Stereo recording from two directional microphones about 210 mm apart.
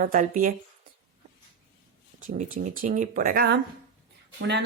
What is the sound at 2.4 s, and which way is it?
A woman's voice, 40° right (ahead or behind).